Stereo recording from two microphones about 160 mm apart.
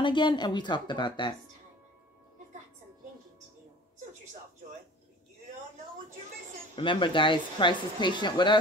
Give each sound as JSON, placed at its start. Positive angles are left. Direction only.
{"t": 0.0, "sound": "speech", "side_deg": 30}
{"t": 6.7, "sound": "speech", "side_deg": 30}